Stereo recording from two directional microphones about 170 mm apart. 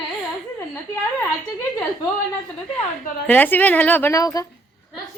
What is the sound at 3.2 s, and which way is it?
A woman's voice, 10° left (ahead or behind).